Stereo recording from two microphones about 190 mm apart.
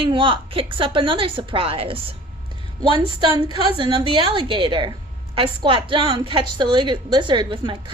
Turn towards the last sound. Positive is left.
turn(degrees=-25)  # may be behind; listen again after turning